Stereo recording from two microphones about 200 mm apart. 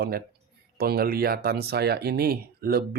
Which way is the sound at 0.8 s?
50° right (ahead or behind).